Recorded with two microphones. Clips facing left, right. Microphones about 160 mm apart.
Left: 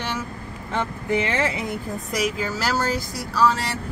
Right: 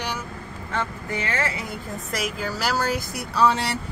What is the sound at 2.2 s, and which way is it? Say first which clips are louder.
Speech: left 4 dB; centre (ahead or behind).